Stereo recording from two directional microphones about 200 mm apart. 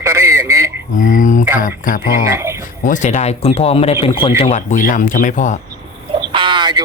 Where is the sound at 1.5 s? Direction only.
40° left (ahead or behind).